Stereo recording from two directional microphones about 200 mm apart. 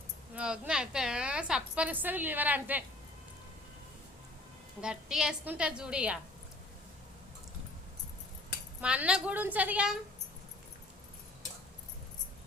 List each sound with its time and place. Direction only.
0.3 s a woman's voice: 5° right (ahead or behind)
4.8 s a woman's voice: 5° right (ahead or behind)
8.8 s a woman's voice: 5° right (ahead or behind)